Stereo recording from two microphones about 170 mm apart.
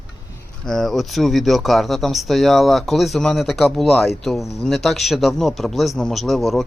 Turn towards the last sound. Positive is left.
turn(degrees=0)  # may be behind; listen again after turning